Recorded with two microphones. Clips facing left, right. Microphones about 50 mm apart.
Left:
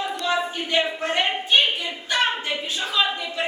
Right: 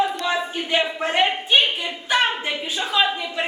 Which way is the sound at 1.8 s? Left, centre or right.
Centre.